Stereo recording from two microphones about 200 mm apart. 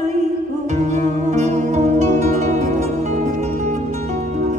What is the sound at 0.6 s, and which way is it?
Music, 35° right (ahead or behind).